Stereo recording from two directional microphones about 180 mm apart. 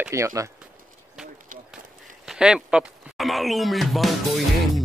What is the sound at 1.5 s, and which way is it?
Run, 50° right (ahead or behind).